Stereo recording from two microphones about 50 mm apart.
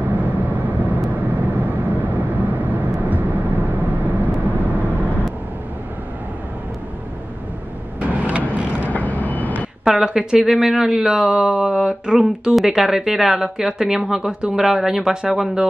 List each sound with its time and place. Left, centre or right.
0.0 s vehicle: right
8.0 s vehicle: right
8.8 s vehicle: left
9.8 s speech: centre
12.5 s speech: centre